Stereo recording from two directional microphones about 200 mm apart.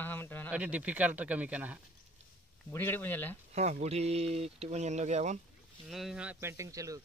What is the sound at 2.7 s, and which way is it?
Speech, 10° left (ahead or behind).